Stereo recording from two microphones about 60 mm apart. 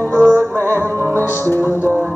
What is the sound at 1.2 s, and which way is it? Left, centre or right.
Music, left.